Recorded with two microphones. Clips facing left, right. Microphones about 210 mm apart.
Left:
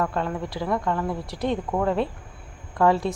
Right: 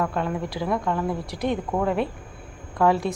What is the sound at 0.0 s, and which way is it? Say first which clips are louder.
A woman's voice: right 1 dB; 10° right (ahead or behind).